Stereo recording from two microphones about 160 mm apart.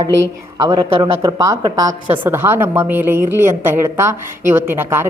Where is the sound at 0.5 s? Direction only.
25° right (ahead or behind).